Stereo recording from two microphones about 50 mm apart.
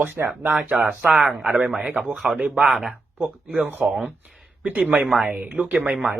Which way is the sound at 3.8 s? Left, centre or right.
Centre.